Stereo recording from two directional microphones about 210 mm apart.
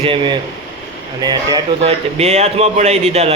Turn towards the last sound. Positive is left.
turn(degrees=-30)  # may be behind; listen again after turning